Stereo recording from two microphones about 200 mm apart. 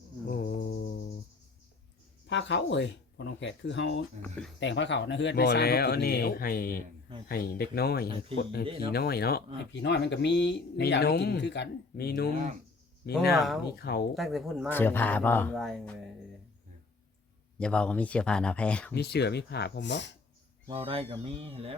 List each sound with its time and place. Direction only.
0.3 s cricket: 50° left (ahead or behind)
2.2 s speech: 65° left (ahead or behind)
4.2 s speech: 5° left (ahead or behind)
4.6 s speech: 60° left (ahead or behind)
8.6 s speech: 30° right (ahead or behind)
8.9 s speech: 50° left (ahead or behind)
13.3 s speech: centre (ahead or behind)
13.7 s speech: 50° left (ahead or behind)
14.2 s speech: centre (ahead or behind)
14.7 s speech: 10° left (ahead or behind)
17.6 s speech: 5° left (ahead or behind)
18.9 s speech: 55° left (ahead or behind)
20.7 s speech: 30° right (ahead or behind)